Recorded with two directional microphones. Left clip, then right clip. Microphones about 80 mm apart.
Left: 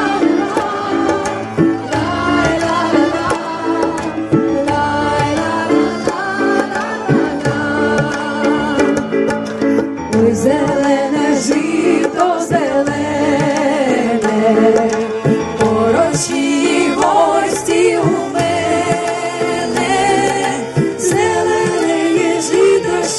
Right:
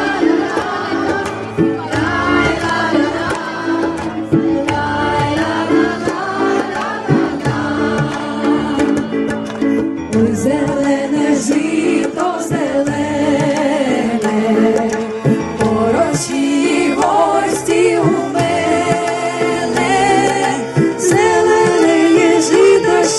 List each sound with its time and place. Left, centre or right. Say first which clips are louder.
10.1 s music: left 3 dB; left; by 23.0 s centre